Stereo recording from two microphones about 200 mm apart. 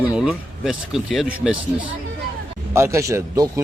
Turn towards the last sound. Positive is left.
turn(degrees=-15)  # may be behind; listen again after turning